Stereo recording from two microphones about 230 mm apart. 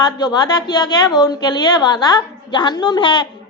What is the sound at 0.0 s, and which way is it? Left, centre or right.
A woman's voice, centre.